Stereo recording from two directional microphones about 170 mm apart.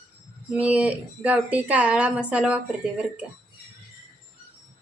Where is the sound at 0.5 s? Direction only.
5° right (ahead or behind).